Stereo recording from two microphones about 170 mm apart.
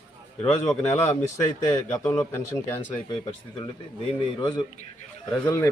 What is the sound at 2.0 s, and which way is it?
Speech, 20° left (ahead or behind).